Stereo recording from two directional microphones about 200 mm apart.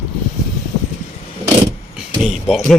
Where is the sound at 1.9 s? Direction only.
Centre (ahead or behind).